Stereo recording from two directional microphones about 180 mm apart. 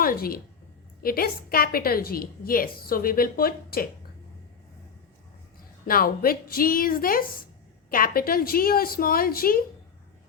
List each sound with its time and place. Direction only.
0.0 s a woman's voice: 55° left (ahead or behind)
5.9 s a woman's voice: 55° left (ahead or behind)